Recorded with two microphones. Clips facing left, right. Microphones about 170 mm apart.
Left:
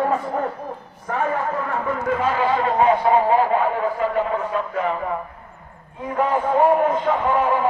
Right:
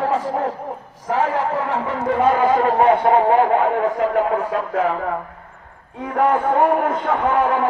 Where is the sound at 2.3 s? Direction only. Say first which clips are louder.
Right 3 dB; 45° right (ahead or behind); by 4.8 s 90° right.